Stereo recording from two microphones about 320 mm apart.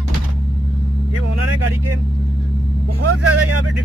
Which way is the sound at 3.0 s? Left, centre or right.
Right.